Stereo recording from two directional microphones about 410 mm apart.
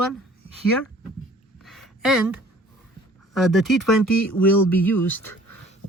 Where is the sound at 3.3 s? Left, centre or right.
Centre.